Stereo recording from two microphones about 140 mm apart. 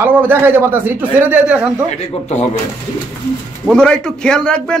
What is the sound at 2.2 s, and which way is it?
Speech, 55° left (ahead or behind).